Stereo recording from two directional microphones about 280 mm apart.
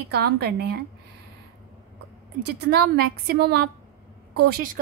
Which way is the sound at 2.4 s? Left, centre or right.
Right.